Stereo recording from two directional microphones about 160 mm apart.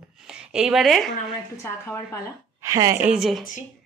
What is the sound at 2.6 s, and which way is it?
Speech, 20° right (ahead or behind).